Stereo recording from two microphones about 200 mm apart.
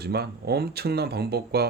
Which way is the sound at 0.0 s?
50° right (ahead or behind).